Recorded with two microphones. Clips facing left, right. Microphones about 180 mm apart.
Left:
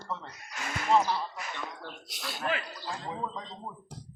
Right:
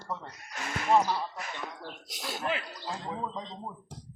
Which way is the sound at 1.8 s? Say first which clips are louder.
Right 1 dB; 45° right (ahead or behind).